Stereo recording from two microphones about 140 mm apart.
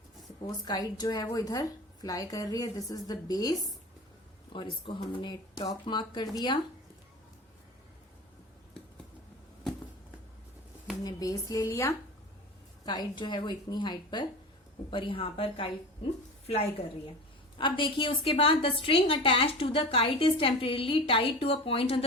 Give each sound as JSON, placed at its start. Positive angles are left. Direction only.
{"t": 0.4, "sound": "a woman's voice", "side_deg": 30}
{"t": 4.5, "sound": "a woman's voice", "side_deg": 35}
{"t": 11.0, "sound": "a woman's voice", "side_deg": 25}
{"t": 12.8, "sound": "a woman's voice", "side_deg": 30}
{"t": 17.6, "sound": "a woman's voice", "side_deg": 35}